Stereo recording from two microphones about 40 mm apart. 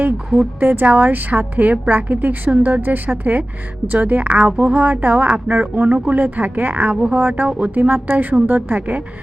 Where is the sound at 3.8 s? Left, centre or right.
Right.